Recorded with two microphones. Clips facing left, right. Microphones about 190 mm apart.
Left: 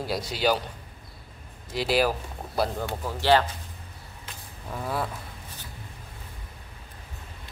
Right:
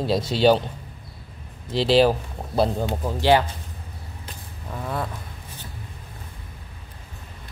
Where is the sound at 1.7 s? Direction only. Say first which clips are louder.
Right 7 dB; 25° right (ahead or behind).